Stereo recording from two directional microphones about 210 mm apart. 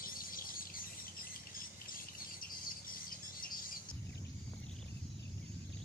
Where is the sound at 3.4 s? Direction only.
45° left (ahead or behind).